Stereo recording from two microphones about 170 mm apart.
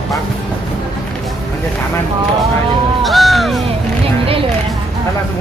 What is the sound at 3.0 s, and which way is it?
Speech, centre (ahead or behind).